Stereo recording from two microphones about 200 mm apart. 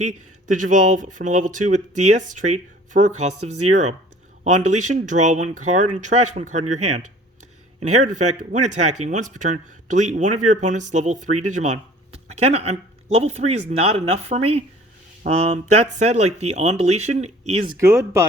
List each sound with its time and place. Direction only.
0.0 s speech: 40° right (ahead or behind)
17.7 s speech: 15° right (ahead or behind)